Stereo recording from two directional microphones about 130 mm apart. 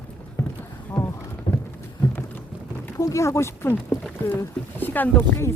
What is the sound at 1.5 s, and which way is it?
Clip-clop, 35° left (ahead or behind).